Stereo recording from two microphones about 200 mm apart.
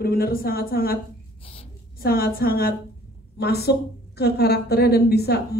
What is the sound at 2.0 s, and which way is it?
A woman's voice, 50° left (ahead or behind).